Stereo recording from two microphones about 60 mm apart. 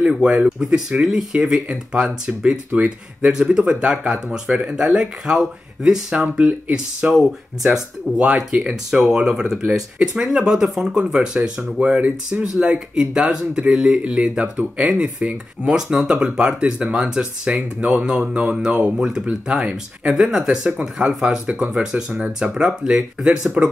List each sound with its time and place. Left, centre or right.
0.0 s speech: centre